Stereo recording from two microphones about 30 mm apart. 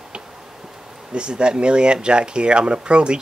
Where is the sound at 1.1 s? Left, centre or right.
Right.